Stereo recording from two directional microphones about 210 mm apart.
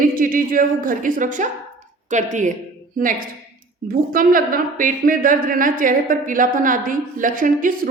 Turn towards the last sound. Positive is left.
turn(degrees=-40)  # may be behind; listen again after turning